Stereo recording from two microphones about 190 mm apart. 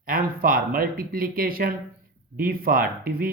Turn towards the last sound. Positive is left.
turn(degrees=-50)  # may be behind; listen again after turning